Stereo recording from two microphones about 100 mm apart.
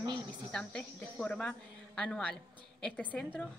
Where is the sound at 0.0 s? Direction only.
50° right (ahead or behind).